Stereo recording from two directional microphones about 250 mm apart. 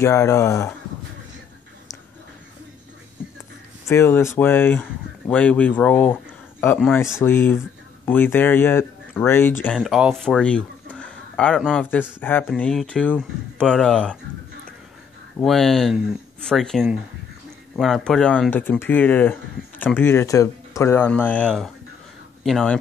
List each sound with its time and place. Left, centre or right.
0.0 s speech: centre
3.8 s speech: centre
15.3 s speech: centre